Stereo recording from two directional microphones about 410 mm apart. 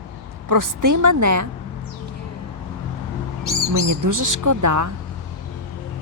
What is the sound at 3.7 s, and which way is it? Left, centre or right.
Speech, right.